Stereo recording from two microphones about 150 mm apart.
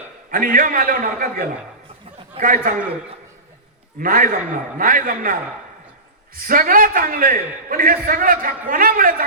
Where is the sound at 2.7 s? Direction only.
65° right (ahead or behind).